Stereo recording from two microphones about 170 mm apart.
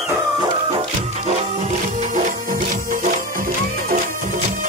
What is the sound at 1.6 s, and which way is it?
Music, 45° right (ahead or behind).